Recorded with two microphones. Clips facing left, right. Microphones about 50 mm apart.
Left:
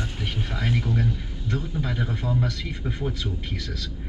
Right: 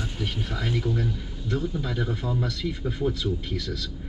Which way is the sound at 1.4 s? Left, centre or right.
Centre.